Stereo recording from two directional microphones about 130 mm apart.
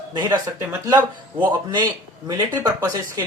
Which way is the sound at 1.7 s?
35° right (ahead or behind).